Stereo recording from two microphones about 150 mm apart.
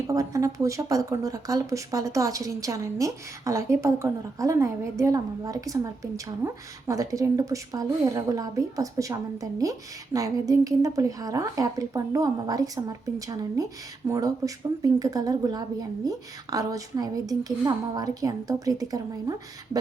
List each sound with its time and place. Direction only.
0.1 s speech: 20° right (ahead or behind)